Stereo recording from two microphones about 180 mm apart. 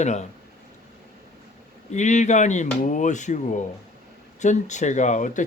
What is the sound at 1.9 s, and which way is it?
Speech, 40° left (ahead or behind).